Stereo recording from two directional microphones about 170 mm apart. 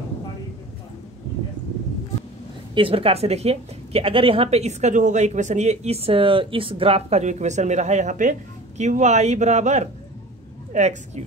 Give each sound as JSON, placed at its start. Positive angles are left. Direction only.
{"t": 2.7, "sound": "a woman's voice", "side_deg": -30}